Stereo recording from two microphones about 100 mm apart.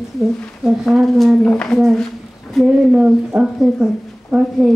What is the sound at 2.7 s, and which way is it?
A woman's voice, 10° right (ahead or behind).